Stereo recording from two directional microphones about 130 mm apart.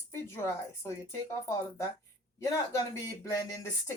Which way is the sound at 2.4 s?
25° left (ahead or behind).